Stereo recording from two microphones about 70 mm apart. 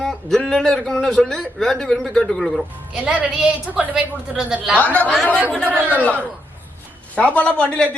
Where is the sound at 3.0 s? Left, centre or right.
Centre.